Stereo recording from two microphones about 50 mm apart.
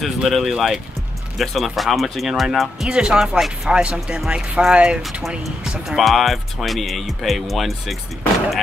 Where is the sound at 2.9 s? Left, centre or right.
Centre.